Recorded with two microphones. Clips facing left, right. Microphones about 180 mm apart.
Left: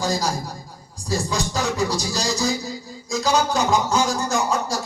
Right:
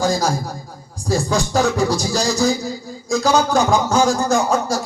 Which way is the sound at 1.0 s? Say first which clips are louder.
Right 5 dB; 50° right (ahead or behind).